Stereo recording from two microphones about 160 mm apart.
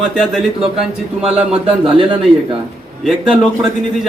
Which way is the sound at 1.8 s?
35° right (ahead or behind).